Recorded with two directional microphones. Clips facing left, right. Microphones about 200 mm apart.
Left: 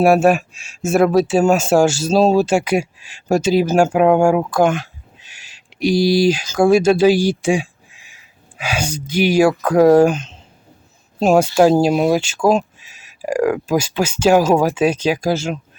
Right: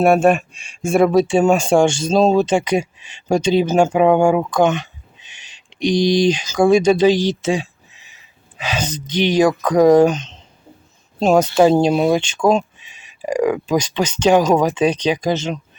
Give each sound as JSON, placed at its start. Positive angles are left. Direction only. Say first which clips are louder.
{"t": 0.0, "sound": "speech", "louder": "left 1 dB", "side_deg": 5}